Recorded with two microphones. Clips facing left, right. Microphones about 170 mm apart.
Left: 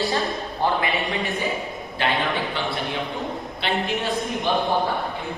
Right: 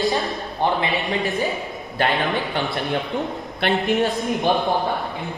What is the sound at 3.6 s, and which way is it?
Speech, 55° right (ahead or behind).